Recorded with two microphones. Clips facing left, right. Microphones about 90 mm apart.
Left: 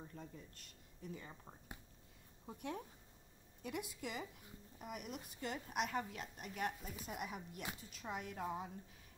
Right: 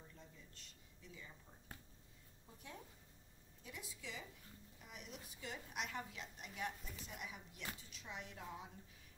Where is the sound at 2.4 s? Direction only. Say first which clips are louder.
Left 10 dB; 60° left (ahead or behind).